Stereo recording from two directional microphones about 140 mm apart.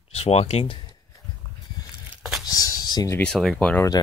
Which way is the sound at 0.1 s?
50° left (ahead or behind).